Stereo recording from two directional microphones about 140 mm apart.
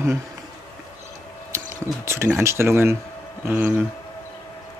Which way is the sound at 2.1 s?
20° right (ahead or behind).